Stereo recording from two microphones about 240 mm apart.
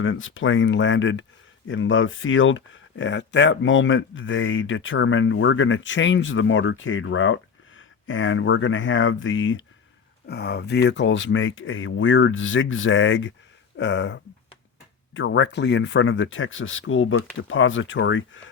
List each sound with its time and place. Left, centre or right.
0.0 s speech: left
10.2 s speech: left